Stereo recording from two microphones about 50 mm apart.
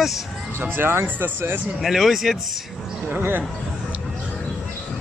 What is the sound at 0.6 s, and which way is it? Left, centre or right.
Speech, right.